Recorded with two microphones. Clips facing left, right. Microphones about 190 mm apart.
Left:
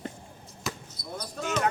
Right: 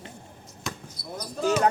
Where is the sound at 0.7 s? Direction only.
Centre (ahead or behind).